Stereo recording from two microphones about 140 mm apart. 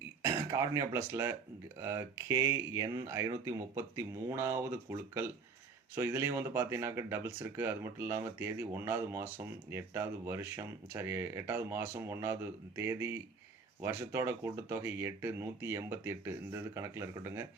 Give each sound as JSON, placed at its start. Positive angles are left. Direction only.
{"t": 0.2, "sound": "speech", "side_deg": -20}
{"t": 5.9, "sound": "speech", "side_deg": -20}